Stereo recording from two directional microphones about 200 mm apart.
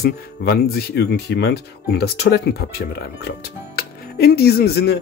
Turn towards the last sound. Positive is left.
turn(degrees=55)  # may be behind; listen again after turning